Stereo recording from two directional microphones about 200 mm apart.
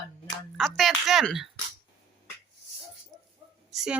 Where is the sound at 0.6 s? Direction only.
Centre (ahead or behind).